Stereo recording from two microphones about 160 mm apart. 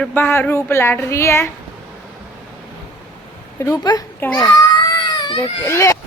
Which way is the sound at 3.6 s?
20° left (ahead or behind).